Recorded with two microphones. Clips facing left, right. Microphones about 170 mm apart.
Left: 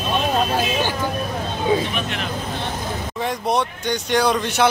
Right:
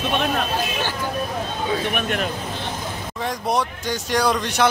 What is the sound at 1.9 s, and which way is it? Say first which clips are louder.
Speech: right 3 dB; 50° right (ahead or behind).